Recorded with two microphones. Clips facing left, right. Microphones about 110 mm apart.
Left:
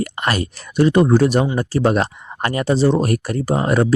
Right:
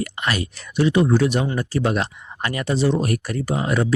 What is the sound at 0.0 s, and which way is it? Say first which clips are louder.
Speech: left 4 dB; 45° left (ahead or behind).